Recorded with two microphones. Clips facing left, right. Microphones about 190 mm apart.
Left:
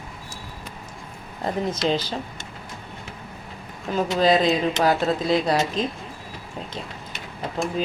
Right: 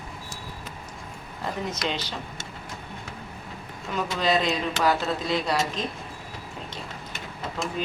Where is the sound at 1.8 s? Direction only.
35° left (ahead or behind).